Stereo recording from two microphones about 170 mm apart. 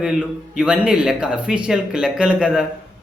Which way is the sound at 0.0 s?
5° right (ahead or behind).